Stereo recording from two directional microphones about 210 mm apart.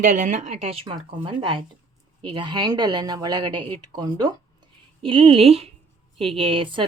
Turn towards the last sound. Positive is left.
turn(degrees=-25)  # may be behind; listen again after turning